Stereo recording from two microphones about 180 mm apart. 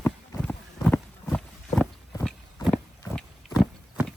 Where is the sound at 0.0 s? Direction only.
10° left (ahead or behind).